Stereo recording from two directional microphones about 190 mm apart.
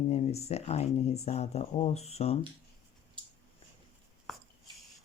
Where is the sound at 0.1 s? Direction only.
35° left (ahead or behind).